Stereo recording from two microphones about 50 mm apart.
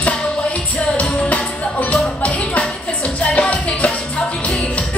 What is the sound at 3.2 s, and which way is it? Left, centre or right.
Music, left.